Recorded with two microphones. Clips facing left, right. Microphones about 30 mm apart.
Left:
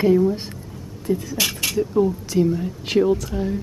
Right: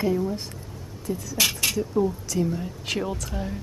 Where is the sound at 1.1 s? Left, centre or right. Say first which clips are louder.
Left 8 dB; left.